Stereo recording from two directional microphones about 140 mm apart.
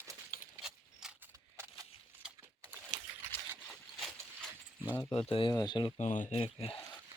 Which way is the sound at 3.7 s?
Centre (ahead or behind).